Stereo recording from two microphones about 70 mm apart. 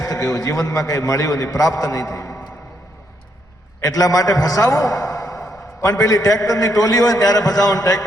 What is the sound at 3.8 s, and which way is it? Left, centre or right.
A man's voice, left.